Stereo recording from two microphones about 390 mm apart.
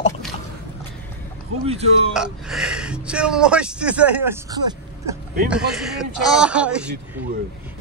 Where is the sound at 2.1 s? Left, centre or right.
Centre.